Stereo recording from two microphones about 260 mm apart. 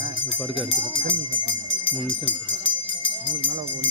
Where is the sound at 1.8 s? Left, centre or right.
Left.